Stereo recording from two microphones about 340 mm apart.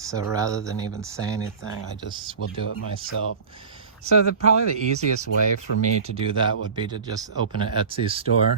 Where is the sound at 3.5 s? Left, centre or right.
Centre.